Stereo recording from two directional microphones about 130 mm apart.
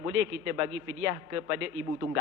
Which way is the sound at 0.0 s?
20° right (ahead or behind).